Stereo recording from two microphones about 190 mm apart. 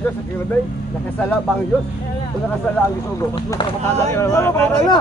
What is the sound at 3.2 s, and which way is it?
Speech, 20° left (ahead or behind).